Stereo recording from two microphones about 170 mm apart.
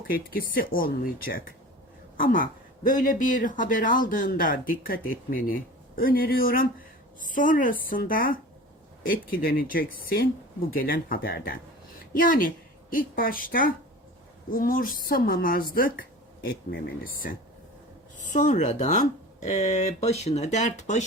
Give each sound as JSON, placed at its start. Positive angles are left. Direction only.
{"t": 0.1, "sound": "speech", "side_deg": 60}
{"t": 18.3, "sound": "speech", "side_deg": 50}